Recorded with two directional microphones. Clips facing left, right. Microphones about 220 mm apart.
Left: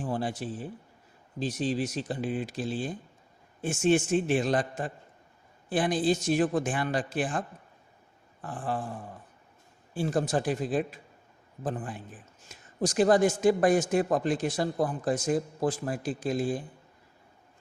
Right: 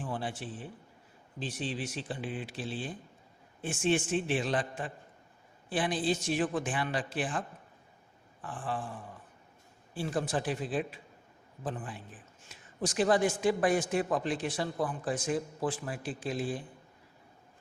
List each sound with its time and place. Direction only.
0.0 s a man's voice: 40° left (ahead or behind)
9.9 s a man's voice: 45° left (ahead or behind)